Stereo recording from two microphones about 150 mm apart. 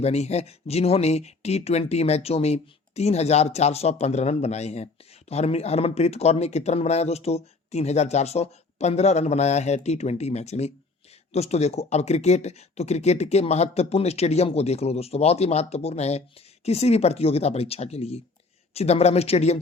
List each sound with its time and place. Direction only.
0.0 s speech: 45° left (ahead or behind)